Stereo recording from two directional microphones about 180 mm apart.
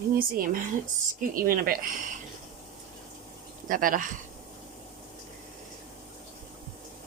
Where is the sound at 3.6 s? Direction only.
50° right (ahead or behind).